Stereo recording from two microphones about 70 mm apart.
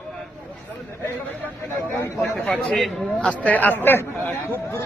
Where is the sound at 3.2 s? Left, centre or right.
Left.